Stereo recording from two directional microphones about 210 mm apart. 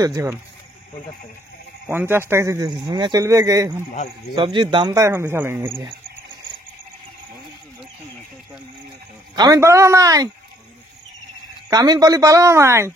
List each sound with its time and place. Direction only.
0.0 s a man's voice: 15° right (ahead or behind)
1.9 s a man's voice: 10° right (ahead or behind)
9.3 s a man's voice: 15° right (ahead or behind)
11.7 s a man's voice: 15° right (ahead or behind)